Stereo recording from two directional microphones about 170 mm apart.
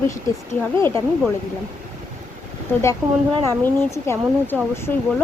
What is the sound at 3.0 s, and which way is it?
Speech, 10° right (ahead or behind).